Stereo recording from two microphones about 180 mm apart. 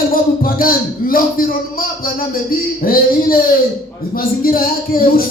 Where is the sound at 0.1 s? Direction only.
55° left (ahead or behind).